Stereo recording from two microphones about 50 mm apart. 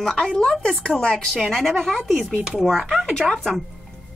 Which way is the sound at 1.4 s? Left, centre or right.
Centre.